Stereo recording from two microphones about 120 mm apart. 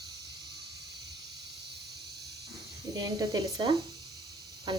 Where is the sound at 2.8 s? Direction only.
35° right (ahead or behind).